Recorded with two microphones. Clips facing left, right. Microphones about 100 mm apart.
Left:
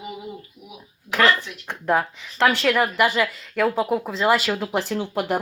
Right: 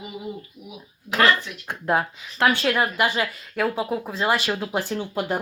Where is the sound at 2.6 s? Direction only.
80° left.